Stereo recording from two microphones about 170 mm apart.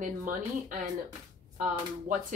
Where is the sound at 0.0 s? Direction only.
50° right (ahead or behind).